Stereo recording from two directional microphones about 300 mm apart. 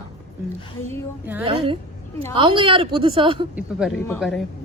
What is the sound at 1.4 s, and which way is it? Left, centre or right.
Speech, centre.